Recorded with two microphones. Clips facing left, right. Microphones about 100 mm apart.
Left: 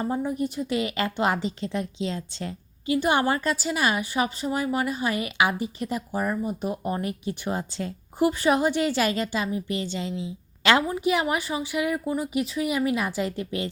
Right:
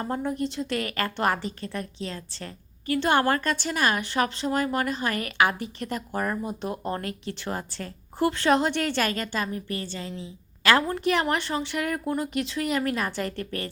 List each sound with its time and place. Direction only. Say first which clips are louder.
0.0 s a woman's voice: left 2 dB; 10° left (ahead or behind); by 2.5 s 25° left (ahead or behind)
2.8 s a woman's voice: even; 15° left (ahead or behind)
10.8 s a woman's voice: even; 10° left (ahead or behind)